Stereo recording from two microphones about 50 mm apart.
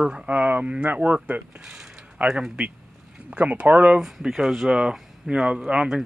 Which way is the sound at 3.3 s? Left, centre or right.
Right.